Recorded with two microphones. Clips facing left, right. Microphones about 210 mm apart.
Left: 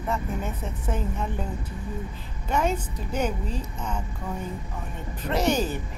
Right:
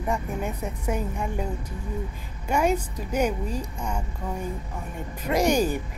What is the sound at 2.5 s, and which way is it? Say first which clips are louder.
A woman's voice: right 2 dB; 10° right (ahead or behind).